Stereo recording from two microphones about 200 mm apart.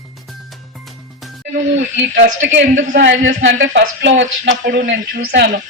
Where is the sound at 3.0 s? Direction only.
60° right (ahead or behind).